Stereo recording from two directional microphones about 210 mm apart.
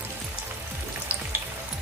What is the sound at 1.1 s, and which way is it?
Frying, 5° right (ahead or behind).